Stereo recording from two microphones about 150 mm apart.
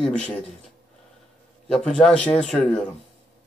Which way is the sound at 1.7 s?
5° left (ahead or behind).